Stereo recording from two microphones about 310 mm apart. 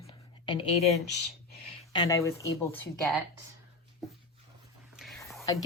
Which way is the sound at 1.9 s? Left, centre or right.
Centre.